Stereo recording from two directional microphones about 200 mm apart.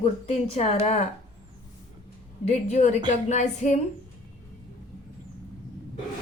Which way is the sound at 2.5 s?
35° left (ahead or behind).